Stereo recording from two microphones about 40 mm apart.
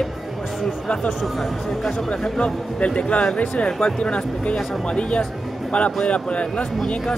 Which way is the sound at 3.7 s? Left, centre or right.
Centre.